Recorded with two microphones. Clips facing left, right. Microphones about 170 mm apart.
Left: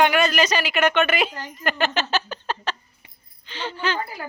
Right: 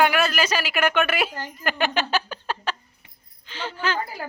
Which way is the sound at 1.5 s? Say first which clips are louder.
Left 1 dB; 10° right (ahead or behind).